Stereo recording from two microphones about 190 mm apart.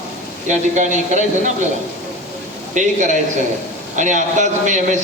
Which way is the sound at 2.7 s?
40° right (ahead or behind).